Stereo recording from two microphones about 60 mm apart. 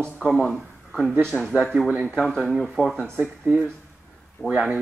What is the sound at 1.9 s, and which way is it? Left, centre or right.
Speech, centre.